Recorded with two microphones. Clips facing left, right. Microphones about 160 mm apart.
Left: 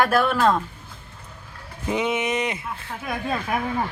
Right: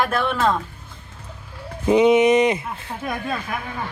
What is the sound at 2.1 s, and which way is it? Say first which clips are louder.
Speech: right 10 dB; 20° right (ahead or behind).